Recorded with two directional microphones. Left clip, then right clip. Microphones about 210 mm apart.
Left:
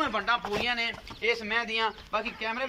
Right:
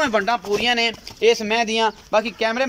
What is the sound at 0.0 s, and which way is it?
Speech, 45° right (ahead or behind).